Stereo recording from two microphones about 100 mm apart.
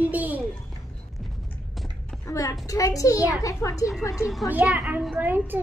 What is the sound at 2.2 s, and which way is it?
A child's voice, 35° left (ahead or behind).